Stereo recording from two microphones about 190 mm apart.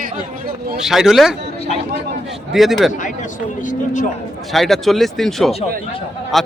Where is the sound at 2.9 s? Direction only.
40° left (ahead or behind).